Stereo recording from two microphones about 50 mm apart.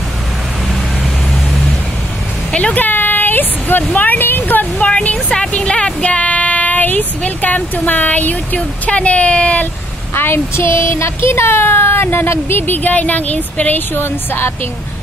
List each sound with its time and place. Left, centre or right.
2.5 s speech: left
2.8 s speech: left
4.8 s speech: left
10.1 s speech: left